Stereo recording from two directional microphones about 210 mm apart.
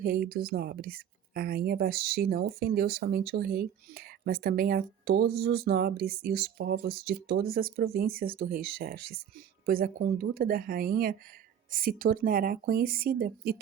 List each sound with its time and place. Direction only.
0.0 s speech: 45° right (ahead or behind)